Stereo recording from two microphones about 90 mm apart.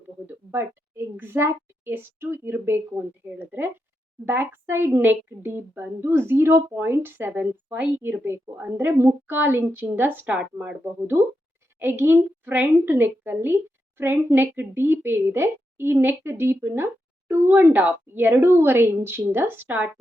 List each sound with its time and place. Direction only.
0.3 s a woman's voice: 25° right (ahead or behind)